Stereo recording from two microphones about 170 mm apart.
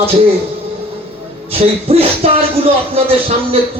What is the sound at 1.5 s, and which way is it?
Speech, 35° right (ahead or behind).